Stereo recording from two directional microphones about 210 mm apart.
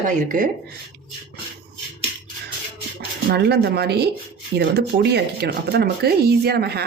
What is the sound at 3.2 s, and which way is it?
Speech, 50° right (ahead or behind).